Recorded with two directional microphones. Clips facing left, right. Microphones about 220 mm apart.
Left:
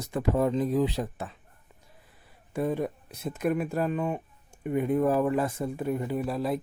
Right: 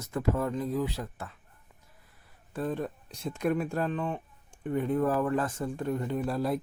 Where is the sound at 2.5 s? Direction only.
10° left (ahead or behind).